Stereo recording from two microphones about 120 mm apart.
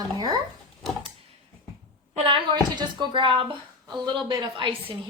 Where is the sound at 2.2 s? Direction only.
40° right (ahead or behind).